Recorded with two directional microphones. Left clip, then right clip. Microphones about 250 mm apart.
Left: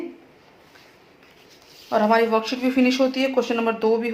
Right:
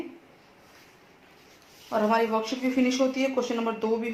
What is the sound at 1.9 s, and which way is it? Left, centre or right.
Speech, left.